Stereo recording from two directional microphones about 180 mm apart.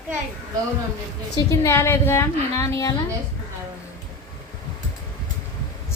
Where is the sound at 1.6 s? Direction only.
15° left (ahead or behind).